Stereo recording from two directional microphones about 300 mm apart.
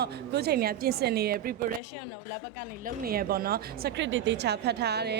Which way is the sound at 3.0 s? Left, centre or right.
Right.